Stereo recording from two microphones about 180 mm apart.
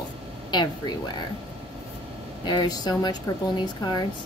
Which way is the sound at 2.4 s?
25° left (ahead or behind).